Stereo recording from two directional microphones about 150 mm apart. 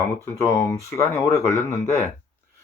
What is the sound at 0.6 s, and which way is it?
Speech, 20° left (ahead or behind).